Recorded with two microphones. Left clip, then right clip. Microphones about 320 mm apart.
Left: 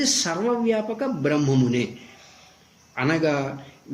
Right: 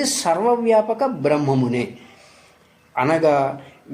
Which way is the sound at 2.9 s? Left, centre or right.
Centre.